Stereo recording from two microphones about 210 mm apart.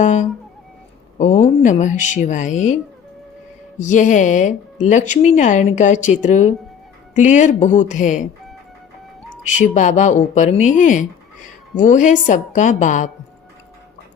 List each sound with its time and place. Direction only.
0.0 s a sound: 35° left (ahead or behind)
1.2 s speech: 35° left (ahead or behind)
3.8 s speech: 35° left (ahead or behind)
9.5 s speech: 35° left (ahead or behind)